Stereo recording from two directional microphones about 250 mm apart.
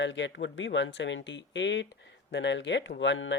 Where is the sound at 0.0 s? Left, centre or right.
Left.